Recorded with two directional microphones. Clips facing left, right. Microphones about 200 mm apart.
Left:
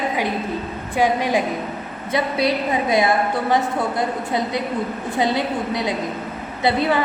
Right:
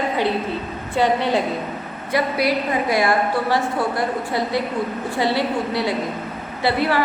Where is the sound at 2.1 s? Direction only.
25° left (ahead or behind).